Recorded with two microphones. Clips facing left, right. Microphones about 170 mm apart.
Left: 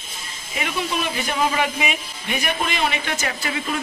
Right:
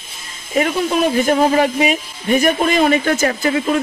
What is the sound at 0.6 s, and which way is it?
Speech, 45° right (ahead or behind).